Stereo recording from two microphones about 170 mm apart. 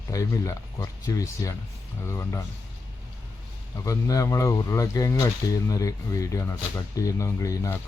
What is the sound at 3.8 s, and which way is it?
Speech, 20° left (ahead or behind).